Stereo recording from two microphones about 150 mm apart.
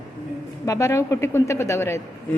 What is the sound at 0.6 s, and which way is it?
A woman's voice, 20° left (ahead or behind).